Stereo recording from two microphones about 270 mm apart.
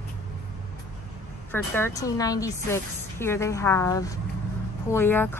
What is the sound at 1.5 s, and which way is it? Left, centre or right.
A woman's voice, centre.